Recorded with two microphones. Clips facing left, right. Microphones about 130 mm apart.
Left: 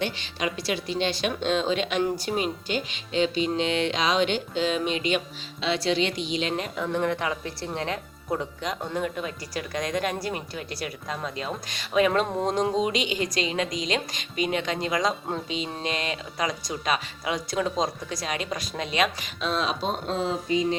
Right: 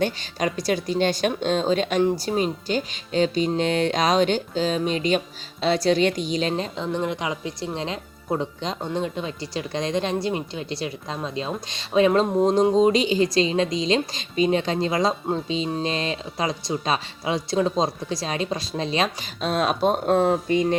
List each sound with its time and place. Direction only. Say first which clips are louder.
0.0 s a woman's voice: right 5 dB; 45° right (ahead or behind)
6.7 s speech: even; 20° right (ahead or behind); by 20.7 s 55° right (ahead or behind)